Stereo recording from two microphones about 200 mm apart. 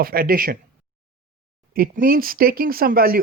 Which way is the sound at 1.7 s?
45° right (ahead or behind).